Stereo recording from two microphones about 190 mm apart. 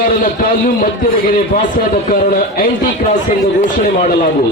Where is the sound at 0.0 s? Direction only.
45° left (ahead or behind).